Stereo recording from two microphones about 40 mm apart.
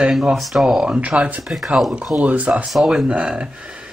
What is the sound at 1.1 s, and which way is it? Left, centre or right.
Speech, right.